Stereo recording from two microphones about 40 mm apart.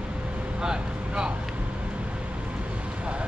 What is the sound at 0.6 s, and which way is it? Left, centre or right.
Vehicle, right.